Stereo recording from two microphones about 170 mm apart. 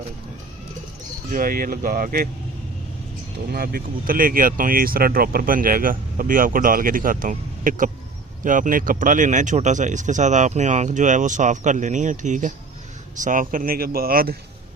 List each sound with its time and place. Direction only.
1.3 s speech: 55° right (ahead or behind)
3.5 s speech: 60° right (ahead or behind)